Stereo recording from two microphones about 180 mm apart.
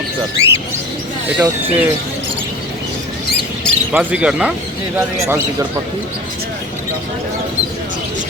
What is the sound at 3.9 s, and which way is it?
Speech, 5° right (ahead or behind).